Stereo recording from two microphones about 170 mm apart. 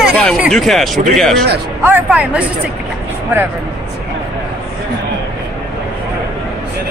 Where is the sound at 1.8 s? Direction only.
10° right (ahead or behind).